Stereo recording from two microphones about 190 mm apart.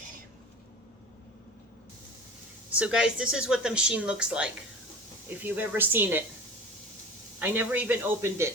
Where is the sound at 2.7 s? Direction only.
5° right (ahead or behind).